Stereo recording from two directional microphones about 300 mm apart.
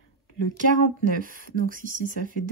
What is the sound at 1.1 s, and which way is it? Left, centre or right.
Speech, right.